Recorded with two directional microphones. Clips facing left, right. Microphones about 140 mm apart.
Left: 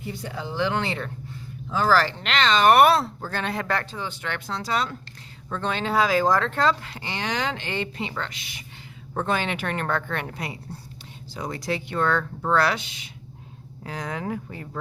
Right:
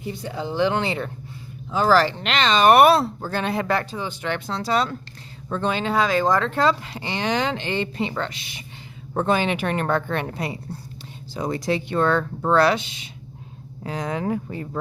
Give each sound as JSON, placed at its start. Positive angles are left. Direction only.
{"t": 0.1, "sound": "speech", "side_deg": -20}
{"t": 5.6, "sound": "speech", "side_deg": 0}
{"t": 6.9, "sound": "a woman's voice", "side_deg": -25}